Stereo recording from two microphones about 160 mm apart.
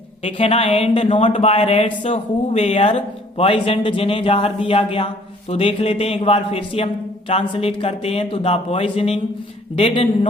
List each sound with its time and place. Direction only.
0.3 s speech: 35° left (ahead or behind)